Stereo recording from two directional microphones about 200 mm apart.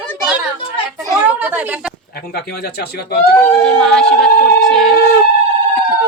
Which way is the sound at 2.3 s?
50° left (ahead or behind).